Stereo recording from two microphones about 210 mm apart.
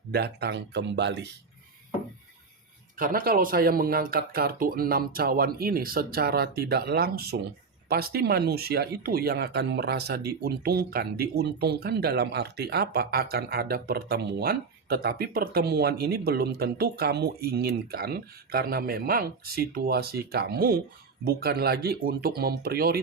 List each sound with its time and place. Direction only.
0.1 s speech: 50° right (ahead or behind)
3.0 s speech: 45° right (ahead or behind)